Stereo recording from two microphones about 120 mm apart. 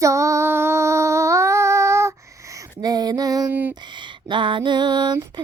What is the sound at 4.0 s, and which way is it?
Speech, 40° right (ahead or behind).